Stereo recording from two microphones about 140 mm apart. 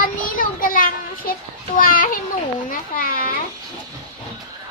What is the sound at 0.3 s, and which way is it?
Children playing, 85° left.